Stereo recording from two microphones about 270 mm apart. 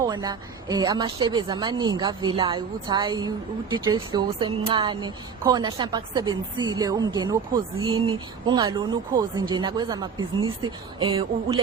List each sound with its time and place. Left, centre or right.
0.0 s a woman's voice: centre